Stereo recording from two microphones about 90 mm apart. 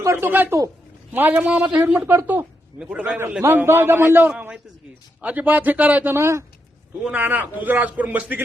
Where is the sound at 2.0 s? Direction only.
25° right (ahead or behind).